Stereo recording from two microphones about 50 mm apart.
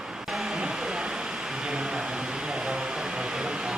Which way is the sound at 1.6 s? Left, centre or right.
Centre.